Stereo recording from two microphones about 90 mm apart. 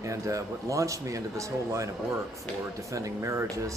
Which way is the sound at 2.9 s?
35° right (ahead or behind).